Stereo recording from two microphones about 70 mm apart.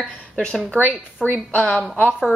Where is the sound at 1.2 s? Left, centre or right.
Left.